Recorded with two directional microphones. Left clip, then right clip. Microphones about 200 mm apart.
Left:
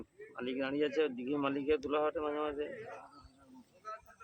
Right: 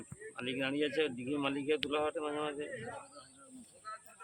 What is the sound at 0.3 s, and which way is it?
Speech, 10° left (ahead or behind).